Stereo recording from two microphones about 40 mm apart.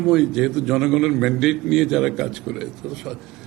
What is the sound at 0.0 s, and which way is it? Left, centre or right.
A man's voice, centre.